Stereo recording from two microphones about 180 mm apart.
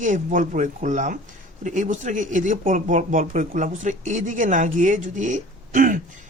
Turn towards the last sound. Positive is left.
turn(degrees=-50)  # may be behind; listen again after turning